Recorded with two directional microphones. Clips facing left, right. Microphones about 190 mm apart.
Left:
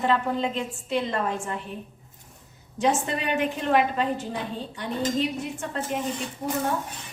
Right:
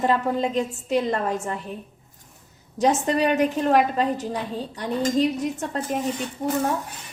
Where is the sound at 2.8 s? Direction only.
40° right (ahead or behind).